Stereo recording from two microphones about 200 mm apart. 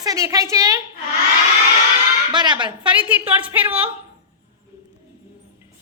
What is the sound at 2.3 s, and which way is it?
Speech, 20° right (ahead or behind).